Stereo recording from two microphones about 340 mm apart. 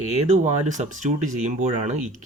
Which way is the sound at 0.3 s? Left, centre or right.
Right.